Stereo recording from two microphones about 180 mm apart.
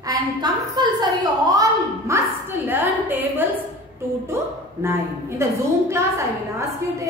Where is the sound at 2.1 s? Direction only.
10° right (ahead or behind).